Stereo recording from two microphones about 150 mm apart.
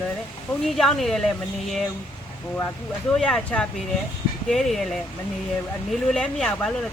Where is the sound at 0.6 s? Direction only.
Centre (ahead or behind).